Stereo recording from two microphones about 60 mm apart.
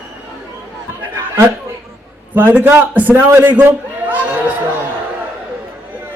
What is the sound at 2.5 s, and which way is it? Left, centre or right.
A man's voice, right.